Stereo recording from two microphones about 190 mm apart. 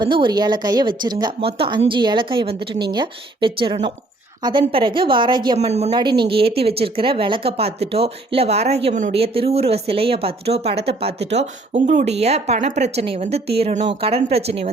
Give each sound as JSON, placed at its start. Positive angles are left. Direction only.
{"t": 0.0, "sound": "speech", "side_deg": -25}
{"t": 5.5, "sound": "speech", "side_deg": -35}
{"t": 5.9, "sound": "speech", "side_deg": -25}